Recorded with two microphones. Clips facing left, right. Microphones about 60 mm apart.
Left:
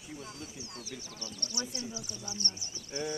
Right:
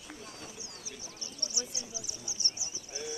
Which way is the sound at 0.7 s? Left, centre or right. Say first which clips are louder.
Left 3 dB; left.